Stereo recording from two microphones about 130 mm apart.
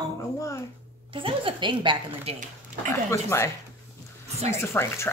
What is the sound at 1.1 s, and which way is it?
A woman's voice, 40° right (ahead or behind).